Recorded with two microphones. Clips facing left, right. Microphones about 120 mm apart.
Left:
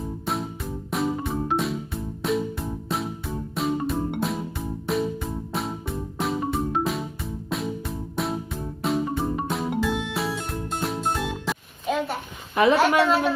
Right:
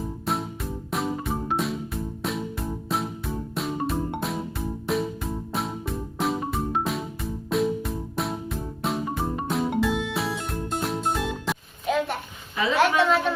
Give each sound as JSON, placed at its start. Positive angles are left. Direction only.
{"t": 0.3, "sound": "music", "side_deg": 0}
{"t": 12.6, "sound": "a woman's voice", "side_deg": 55}